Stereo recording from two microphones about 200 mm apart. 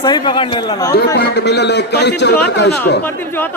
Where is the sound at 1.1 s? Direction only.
55° left (ahead or behind).